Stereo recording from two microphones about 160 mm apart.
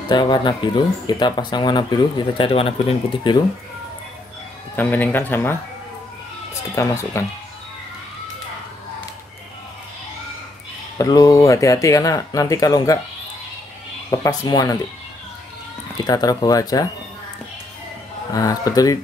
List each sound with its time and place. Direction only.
0.1 s speech: 25° left (ahead or behind)
4.7 s speech: 10° left (ahead or behind)
6.7 s speech: 20° left (ahead or behind)
11.0 s speech: 20° left (ahead or behind)
14.1 s speech: 20° left (ahead or behind)
16.0 s speech: 25° left (ahead or behind)
18.3 s speech: 20° left (ahead or behind)